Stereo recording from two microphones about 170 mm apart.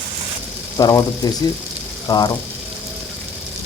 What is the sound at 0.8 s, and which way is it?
Speech, 25° left (ahead or behind).